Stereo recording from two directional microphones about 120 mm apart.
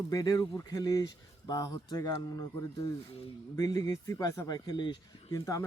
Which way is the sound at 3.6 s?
30° left (ahead or behind).